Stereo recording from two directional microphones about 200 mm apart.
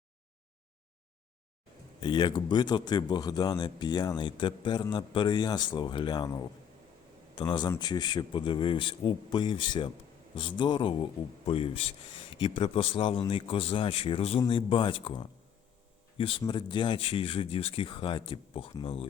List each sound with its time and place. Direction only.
2.0 s speech: 25° left (ahead or behind)